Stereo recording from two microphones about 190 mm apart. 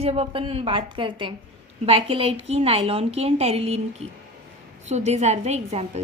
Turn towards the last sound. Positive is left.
turn(degrees=-35)  # may be behind; listen again after turning